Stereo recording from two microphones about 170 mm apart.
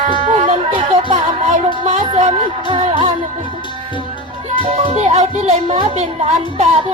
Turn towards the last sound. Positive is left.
turn(degrees=-40)  # may be behind; listen again after turning